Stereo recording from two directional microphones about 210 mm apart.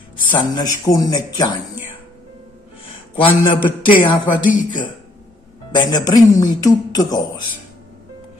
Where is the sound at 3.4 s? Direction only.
20° left (ahead or behind).